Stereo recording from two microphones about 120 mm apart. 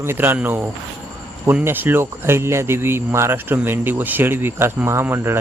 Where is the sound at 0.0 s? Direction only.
20° right (ahead or behind).